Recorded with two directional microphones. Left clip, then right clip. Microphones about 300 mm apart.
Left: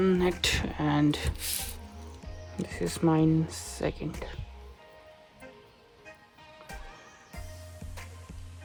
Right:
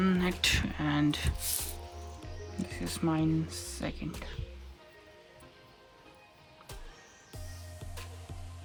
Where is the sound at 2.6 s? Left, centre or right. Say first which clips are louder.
Left 6 dB; left.